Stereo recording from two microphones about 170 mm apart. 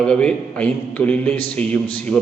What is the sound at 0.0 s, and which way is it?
A man's voice, 5° left (ahead or behind).